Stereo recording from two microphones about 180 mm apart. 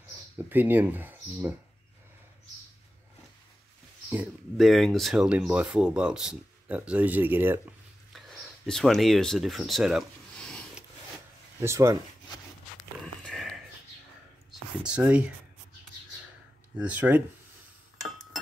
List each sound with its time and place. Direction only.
0.4 s speech: 10° right (ahead or behind)
4.6 s speech: centre (ahead or behind)
8.1 s speech: centre (ahead or behind)
11.6 s speech: 15° right (ahead or behind)
13.0 s sniff: 5° left (ahead or behind)
14.5 s speech: 5° right (ahead or behind)
16.7 s speech: 10° right (ahead or behind)